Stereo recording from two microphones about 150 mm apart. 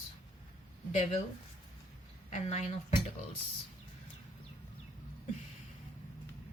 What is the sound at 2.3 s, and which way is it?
Speech, 50° left (ahead or behind).